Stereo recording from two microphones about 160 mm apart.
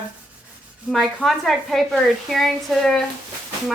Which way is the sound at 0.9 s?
Centre (ahead or behind).